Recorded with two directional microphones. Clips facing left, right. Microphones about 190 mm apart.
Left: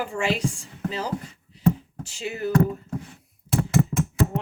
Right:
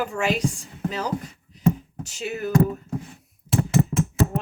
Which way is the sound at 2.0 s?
30° left (ahead or behind).